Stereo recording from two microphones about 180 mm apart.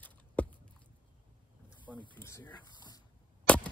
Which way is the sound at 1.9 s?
5° left (ahead or behind).